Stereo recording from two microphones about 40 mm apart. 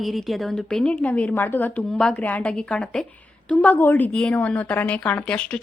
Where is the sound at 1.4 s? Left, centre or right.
Left.